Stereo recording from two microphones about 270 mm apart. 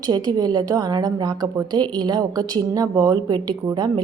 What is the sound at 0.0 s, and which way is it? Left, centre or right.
A woman's voice, centre.